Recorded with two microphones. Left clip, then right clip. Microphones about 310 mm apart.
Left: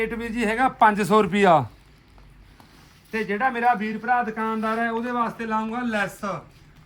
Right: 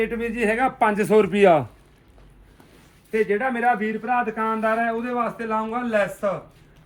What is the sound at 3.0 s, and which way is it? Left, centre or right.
A man's voice, left.